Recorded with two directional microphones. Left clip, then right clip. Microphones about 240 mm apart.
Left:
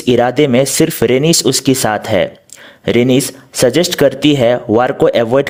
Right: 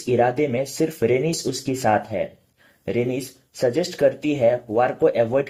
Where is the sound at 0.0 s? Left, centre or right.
Left.